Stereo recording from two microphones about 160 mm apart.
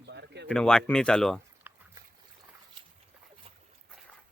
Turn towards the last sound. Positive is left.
turn(degrees=-35)  # may be behind; listen again after turning